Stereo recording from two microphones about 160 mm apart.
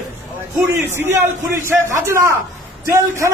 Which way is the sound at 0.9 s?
15° right (ahead or behind).